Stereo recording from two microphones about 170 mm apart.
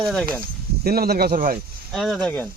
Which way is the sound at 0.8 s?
65° right (ahead or behind).